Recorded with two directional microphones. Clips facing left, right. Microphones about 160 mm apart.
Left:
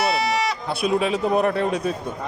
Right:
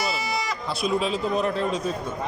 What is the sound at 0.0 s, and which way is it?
Bleat, 75° left (ahead or behind).